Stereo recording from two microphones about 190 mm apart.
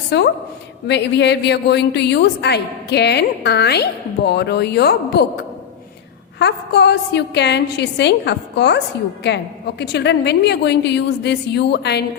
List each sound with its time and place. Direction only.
0.1 s a woman's voice: 65° left (ahead or behind)
6.4 s a woman's voice: 60° left (ahead or behind)